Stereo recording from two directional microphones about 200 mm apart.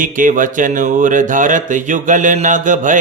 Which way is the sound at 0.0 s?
40° right (ahead or behind).